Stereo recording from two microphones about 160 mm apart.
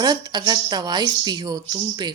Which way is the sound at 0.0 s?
25° right (ahead or behind).